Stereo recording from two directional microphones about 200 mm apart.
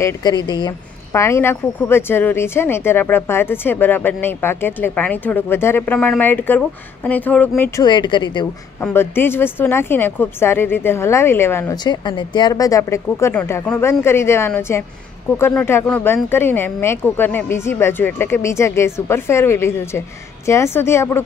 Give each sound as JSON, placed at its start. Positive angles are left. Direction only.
{"t": 0.0, "sound": "speech", "side_deg": 20}
{"t": 7.8, "sound": "speech", "side_deg": 20}
{"t": 8.8, "sound": "speech", "side_deg": 10}